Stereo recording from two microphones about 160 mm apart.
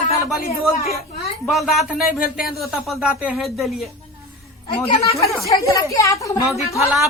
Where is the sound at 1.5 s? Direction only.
Centre (ahead or behind).